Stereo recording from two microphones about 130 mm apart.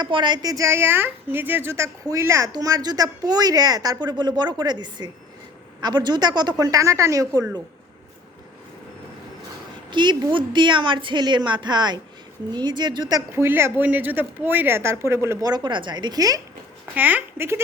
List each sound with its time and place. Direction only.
0.0 s a woman's voice: 35° right (ahead or behind)
9.9 s a woman's voice: 35° right (ahead or behind)
13.4 s a woman's voice: 20° right (ahead or behind)
16.9 s speech: 10° right (ahead or behind)